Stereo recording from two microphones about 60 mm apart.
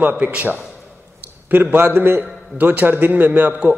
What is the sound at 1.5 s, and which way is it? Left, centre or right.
Speech, right.